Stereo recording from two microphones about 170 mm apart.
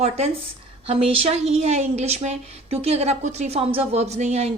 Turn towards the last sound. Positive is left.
turn(degrees=-40)  # may be behind; listen again after turning